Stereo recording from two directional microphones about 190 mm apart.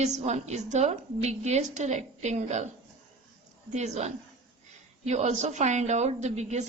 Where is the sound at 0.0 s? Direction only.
35° right (ahead or behind).